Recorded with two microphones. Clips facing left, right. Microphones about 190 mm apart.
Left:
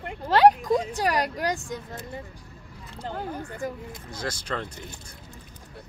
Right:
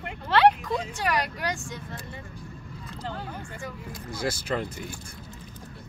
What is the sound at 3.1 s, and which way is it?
Speech, 35° left (ahead or behind).